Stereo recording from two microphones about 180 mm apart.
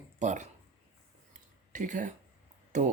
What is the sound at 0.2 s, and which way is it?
Speech, 40° right (ahead or behind).